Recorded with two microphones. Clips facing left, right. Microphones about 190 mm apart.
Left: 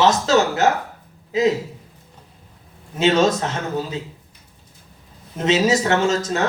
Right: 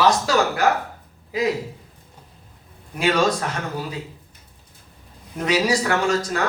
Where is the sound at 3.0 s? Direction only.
25° left (ahead or behind).